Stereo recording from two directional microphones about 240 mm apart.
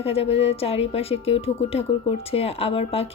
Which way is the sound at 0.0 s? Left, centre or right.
Left.